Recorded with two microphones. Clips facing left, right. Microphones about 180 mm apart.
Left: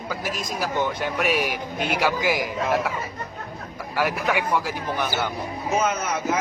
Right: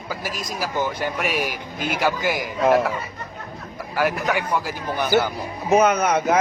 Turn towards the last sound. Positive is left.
turn(degrees=-65)  # may be behind; listen again after turning